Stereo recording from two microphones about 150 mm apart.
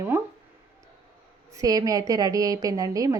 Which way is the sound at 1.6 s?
25° right (ahead or behind).